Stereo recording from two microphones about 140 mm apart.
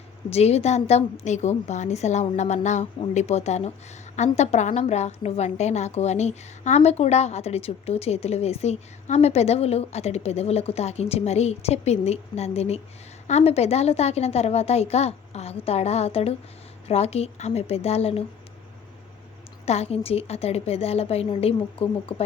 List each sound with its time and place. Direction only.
0.3 s a woman's voice: 50° left (ahead or behind)
19.6 s a woman's voice: 50° left (ahead or behind)